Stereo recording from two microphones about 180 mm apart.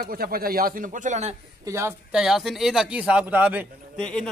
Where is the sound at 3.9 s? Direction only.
5° left (ahead or behind).